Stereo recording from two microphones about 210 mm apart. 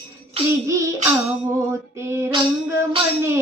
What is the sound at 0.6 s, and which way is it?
Female singing, 15° right (ahead or behind).